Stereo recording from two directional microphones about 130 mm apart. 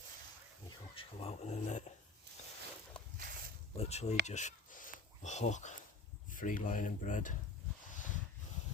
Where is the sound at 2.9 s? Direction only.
5° left (ahead or behind).